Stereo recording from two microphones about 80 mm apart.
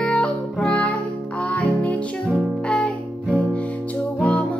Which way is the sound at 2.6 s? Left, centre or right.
Centre.